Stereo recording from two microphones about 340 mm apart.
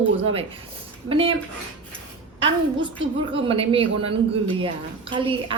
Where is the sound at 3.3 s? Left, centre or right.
Centre.